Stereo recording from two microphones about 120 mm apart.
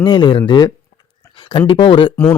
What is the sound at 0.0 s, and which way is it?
Speech, 40° left (ahead or behind).